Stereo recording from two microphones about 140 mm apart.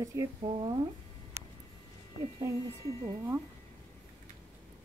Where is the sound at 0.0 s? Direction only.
25° right (ahead or behind).